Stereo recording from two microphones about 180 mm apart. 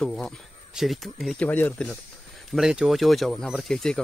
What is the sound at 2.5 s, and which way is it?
Speech, 5° right (ahead or behind).